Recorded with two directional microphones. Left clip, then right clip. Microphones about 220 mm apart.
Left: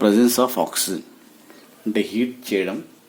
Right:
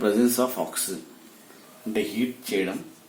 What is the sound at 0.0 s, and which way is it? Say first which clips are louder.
Speech: left 6 dB; 45° left (ahead or behind).